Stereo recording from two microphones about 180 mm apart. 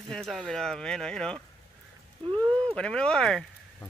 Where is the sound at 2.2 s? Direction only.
25° right (ahead or behind).